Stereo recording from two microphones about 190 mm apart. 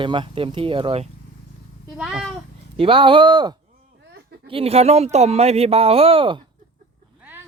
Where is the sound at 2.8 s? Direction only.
25° right (ahead or behind).